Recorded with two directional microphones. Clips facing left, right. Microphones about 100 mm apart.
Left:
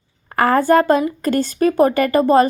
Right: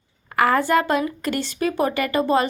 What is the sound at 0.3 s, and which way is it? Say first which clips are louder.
A woman's voice: left 5 dB; 40° left (ahead or behind).